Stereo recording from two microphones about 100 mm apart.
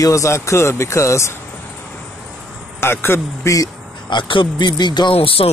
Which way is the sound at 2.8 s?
25° left (ahead or behind).